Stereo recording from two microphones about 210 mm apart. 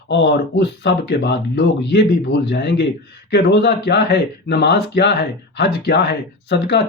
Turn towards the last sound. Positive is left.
turn(degrees=55)  # may be behind; listen again after turning